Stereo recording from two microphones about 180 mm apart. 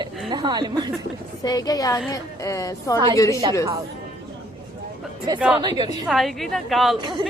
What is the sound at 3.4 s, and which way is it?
Speech, 25° right (ahead or behind).